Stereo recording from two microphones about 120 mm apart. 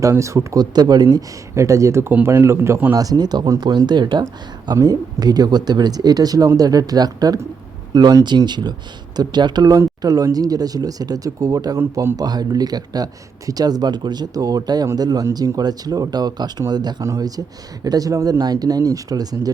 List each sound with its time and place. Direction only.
0.0 s speech: 25° right (ahead or behind)